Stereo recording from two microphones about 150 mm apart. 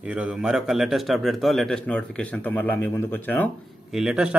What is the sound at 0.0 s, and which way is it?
A man's voice, 5° right (ahead or behind).